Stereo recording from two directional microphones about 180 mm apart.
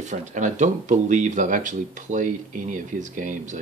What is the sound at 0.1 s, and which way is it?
Speech, 40° right (ahead or behind).